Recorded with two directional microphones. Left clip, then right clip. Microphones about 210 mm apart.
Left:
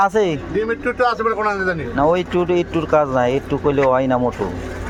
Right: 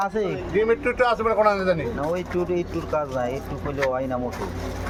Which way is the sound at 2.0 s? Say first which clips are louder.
Left 9 dB; 45° left (ahead or behind).